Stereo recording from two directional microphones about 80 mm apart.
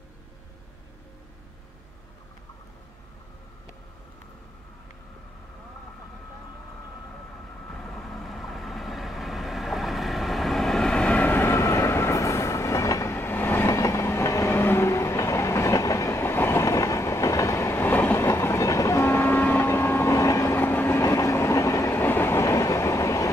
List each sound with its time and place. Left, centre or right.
7.7 s vehicle: centre; by 13.7 s left
13.7 s train: left
20.5 s train: left